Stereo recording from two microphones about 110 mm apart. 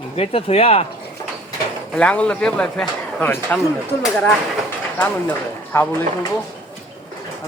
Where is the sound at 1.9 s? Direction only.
10° left (ahead or behind).